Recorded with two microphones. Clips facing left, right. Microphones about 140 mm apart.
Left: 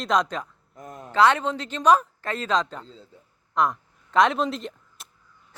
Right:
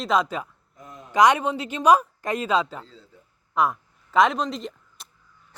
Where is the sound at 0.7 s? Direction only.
50° left (ahead or behind).